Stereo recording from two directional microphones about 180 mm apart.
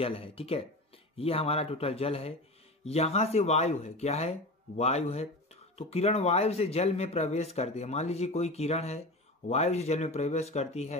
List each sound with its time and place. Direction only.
0.0 s speech: 30° left (ahead or behind)